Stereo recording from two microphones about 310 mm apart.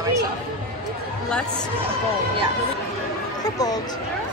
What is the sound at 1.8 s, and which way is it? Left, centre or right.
Speech, centre.